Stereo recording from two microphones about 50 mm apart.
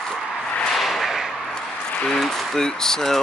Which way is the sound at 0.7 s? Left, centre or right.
Centre.